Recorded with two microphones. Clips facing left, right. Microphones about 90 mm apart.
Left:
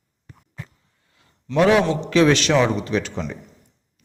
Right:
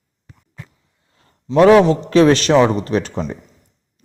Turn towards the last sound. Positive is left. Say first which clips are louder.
# right 4 dB
turn(degrees=-40)  # may be behind; listen again after turning